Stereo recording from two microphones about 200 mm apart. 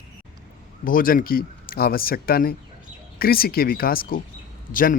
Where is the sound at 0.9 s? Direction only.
45° left (ahead or behind).